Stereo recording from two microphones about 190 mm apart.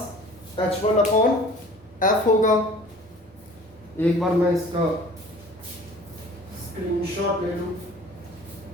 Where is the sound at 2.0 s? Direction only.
45° left (ahead or behind).